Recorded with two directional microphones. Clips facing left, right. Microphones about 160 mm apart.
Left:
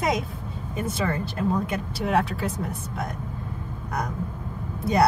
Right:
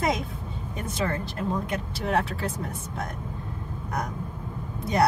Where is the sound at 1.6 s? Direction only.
Centre (ahead or behind).